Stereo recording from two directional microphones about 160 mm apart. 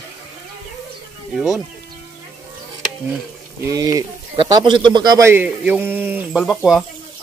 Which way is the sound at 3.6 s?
20° right (ahead or behind).